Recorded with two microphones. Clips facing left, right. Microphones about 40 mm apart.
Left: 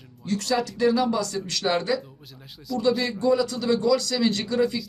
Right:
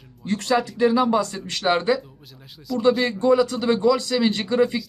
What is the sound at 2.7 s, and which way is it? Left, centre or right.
Speech, centre.